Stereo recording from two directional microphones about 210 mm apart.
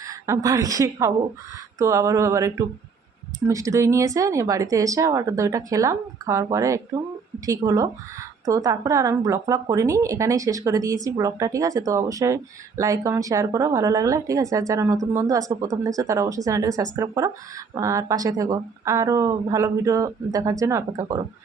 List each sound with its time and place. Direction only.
0.0 s speech: 15° right (ahead or behind)